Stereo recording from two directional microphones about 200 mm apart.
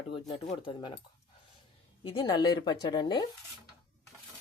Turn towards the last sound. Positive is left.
turn(degrees=20)  # may be behind; listen again after turning